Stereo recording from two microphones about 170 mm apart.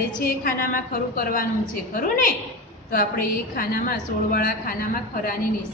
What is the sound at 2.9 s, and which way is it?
A woman's voice, 60° left (ahead or behind).